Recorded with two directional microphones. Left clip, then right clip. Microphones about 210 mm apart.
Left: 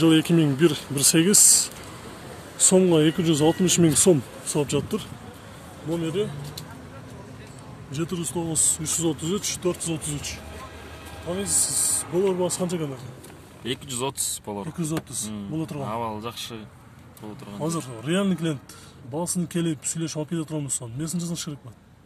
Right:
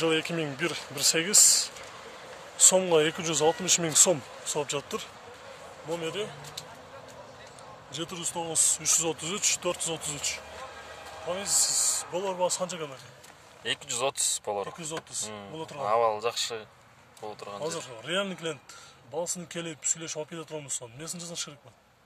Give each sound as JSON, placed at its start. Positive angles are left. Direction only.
{"t": 0.0, "sound": "speech", "side_deg": 10}
{"t": 2.6, "sound": "speech", "side_deg": 0}
{"t": 5.9, "sound": "speech", "side_deg": -15}
{"t": 8.1, "sound": "speech", "side_deg": -10}
{"t": 11.2, "sound": "speech", "side_deg": -10}
{"t": 13.7, "sound": "speech", "side_deg": -30}
{"t": 15.5, "sound": "speech", "side_deg": 20}
{"t": 15.9, "sound": "speech", "side_deg": -40}
{"t": 17.6, "sound": "speech", "side_deg": 20}